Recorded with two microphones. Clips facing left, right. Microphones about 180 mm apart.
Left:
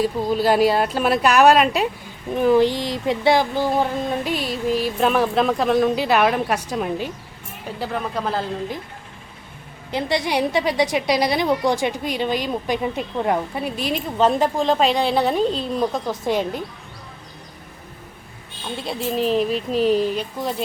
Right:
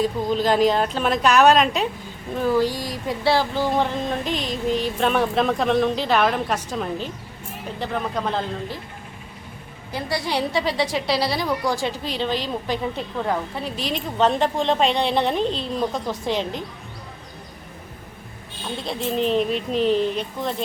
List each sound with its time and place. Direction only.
0.0 s speech: 10° left (ahead or behind)
9.9 s speech: 20° left (ahead or behind)
13.8 s speech: 5° left (ahead or behind)
18.9 s speech: 5° left (ahead or behind)